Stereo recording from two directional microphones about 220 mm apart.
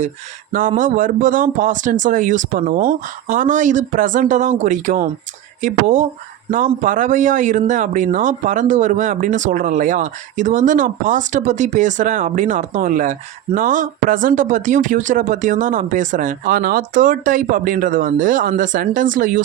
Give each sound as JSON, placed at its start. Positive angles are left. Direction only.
{"t": 0.8, "sound": "speech", "side_deg": -35}